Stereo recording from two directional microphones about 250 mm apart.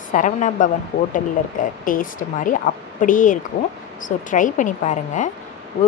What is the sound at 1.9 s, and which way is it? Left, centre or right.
Speech, left.